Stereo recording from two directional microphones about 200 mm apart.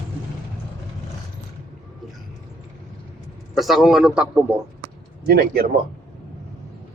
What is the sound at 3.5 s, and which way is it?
Speech, centre (ahead or behind).